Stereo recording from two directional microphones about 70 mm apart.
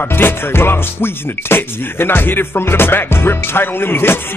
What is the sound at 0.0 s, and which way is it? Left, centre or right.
Speech, left.